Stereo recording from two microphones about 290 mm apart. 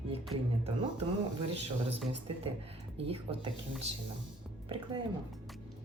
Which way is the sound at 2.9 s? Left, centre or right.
Centre.